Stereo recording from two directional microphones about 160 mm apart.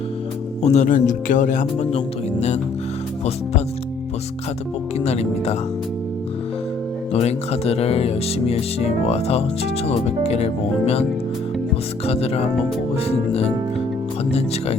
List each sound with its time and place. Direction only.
0.6 s speech: 45° left (ahead or behind)
4.9 s speech: 40° left (ahead or behind)
7.1 s speech: 40° left (ahead or behind)
12.0 s speech: 40° left (ahead or behind)